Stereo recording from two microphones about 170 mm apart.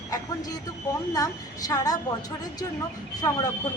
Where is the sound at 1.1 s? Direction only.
20° left (ahead or behind).